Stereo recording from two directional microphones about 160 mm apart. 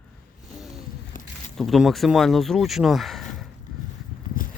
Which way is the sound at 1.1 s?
55° left (ahead or behind).